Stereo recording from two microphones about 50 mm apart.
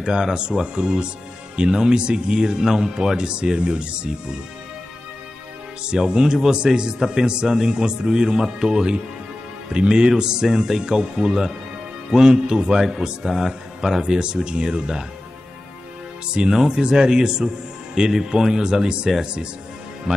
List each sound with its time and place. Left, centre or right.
0.0 s a man's voice: centre
5.9 s a man's voice: centre
16.3 s a man's voice: centre